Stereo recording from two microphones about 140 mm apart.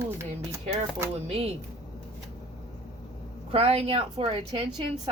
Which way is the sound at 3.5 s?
45° right (ahead or behind).